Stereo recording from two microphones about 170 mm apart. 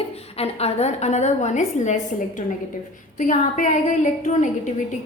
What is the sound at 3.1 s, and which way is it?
A woman's voice, 50° left (ahead or behind).